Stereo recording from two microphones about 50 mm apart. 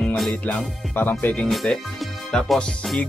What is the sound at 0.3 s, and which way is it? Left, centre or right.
Music, left.